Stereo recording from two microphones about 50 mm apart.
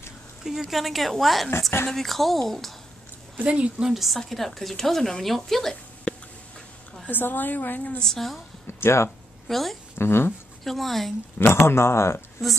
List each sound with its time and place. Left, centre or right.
0.4 s speech: centre
3.4 s a woman's voice: right
3.8 s speech: centre
7.1 s a woman's voice: left
8.0 s a woman's voice: centre
8.6 s speech: left
9.5 s speech: centre
9.9 s speech: left
10.6 s speech: centre
11.3 s speech: left